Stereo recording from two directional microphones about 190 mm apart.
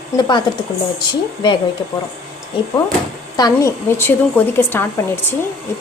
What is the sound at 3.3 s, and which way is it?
A woman's voice, 20° left (ahead or behind).